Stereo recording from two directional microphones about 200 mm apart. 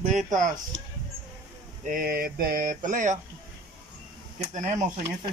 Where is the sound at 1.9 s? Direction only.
45° right (ahead or behind).